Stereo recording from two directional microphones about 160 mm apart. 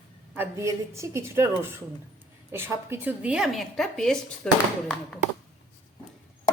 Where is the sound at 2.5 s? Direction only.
15° right (ahead or behind); by 4.5 s 5° left (ahead or behind).